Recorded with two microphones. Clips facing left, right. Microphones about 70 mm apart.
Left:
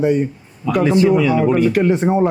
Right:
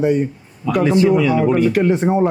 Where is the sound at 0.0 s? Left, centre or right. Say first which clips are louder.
Even; left.